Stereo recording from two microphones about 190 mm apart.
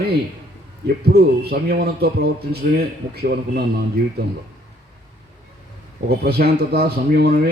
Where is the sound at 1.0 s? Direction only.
55° right (ahead or behind).